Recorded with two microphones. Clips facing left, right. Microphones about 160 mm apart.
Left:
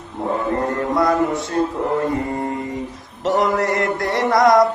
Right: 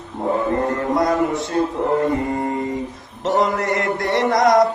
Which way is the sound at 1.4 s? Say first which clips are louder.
Even; 20° right (ahead or behind).